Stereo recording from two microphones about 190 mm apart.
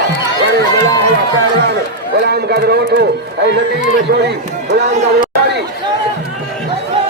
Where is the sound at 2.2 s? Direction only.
60° right (ahead or behind).